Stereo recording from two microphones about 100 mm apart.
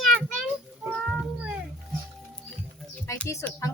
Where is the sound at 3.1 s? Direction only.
30° left (ahead or behind).